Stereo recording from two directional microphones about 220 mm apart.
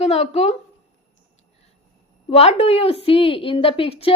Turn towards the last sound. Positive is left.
turn(degrees=25)  # may be behind; listen again after turning